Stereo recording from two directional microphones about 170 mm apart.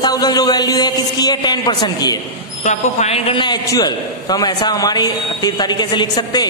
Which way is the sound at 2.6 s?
45° left (ahead or behind).